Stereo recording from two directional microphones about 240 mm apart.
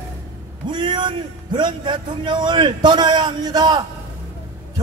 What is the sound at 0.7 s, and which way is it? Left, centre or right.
A man's voice, centre.